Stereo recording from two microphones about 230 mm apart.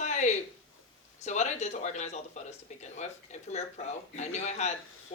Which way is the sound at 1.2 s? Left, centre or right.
Left.